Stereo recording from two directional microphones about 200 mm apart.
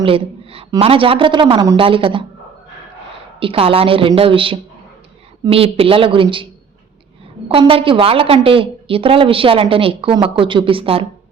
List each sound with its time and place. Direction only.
0.0 s a woman's voice: 25° right (ahead or behind)
3.4 s a woman's voice: 25° right (ahead or behind)